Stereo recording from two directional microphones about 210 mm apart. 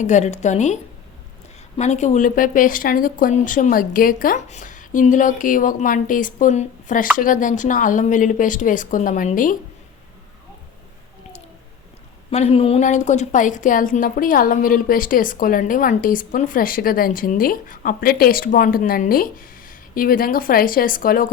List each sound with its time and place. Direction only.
0.0 s a woman's voice: 35° left (ahead or behind)
12.3 s a woman's voice: 30° left (ahead or behind)